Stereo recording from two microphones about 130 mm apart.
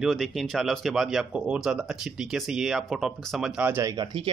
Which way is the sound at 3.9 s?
35° right (ahead or behind).